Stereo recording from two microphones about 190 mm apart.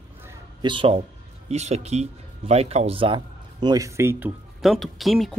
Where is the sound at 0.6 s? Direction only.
25° right (ahead or behind).